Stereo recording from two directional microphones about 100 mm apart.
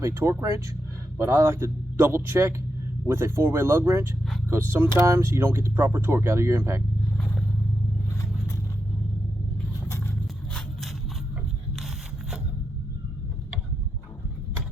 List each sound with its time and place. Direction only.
0.0 s speech: 25° right (ahead or behind)